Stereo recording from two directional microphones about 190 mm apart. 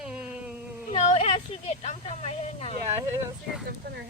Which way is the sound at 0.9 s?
35° left (ahead or behind).